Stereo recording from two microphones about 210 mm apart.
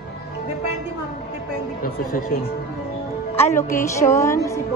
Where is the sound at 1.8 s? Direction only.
45° left (ahead or behind).